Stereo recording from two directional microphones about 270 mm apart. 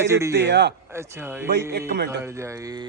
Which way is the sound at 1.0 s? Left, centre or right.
Centre.